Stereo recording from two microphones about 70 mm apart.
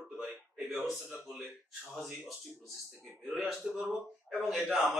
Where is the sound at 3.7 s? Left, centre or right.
Centre.